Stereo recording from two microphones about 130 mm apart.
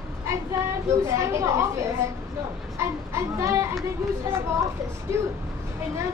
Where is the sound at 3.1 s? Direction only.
20° right (ahead or behind).